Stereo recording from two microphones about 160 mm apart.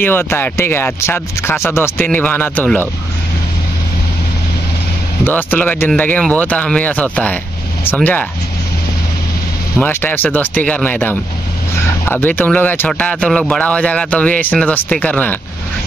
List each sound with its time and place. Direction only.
0.0 s a man's voice: 15° left (ahead or behind)
5.2 s a man's voice: 10° left (ahead or behind)
9.8 s a man's voice: 10° left (ahead or behind)